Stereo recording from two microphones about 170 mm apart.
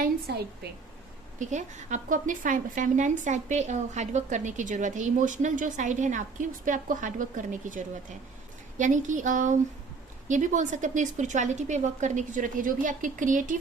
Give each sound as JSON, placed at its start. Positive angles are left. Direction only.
{"t": 1.4, "sound": "a woman's voice", "side_deg": -45}